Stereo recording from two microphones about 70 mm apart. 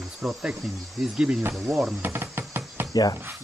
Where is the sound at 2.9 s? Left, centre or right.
Left.